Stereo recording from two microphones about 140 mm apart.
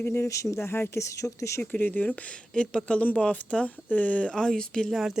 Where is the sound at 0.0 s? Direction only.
20° left (ahead or behind).